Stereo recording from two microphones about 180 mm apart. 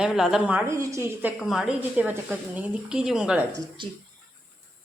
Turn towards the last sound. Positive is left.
turn(degrees=-25)  # may be behind; listen again after turning